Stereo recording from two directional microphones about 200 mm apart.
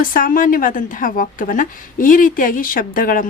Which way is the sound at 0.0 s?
45° left (ahead or behind).